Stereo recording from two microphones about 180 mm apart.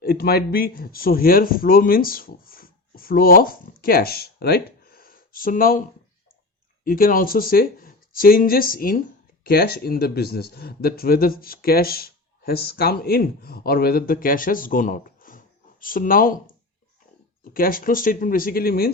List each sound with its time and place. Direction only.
0.0 s speech: 60° left (ahead or behind)
6.8 s speech: 50° left (ahead or behind)
17.4 s speech: 50° left (ahead or behind)